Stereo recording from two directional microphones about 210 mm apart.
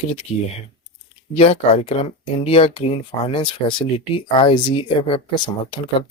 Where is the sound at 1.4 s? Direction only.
30° left (ahead or behind).